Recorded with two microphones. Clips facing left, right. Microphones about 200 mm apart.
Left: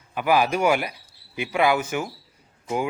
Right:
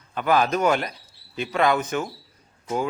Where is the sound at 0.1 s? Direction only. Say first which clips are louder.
Even; 10° left (ahead or behind).